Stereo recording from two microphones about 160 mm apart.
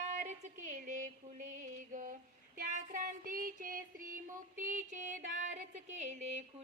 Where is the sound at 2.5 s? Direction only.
55° right (ahead or behind).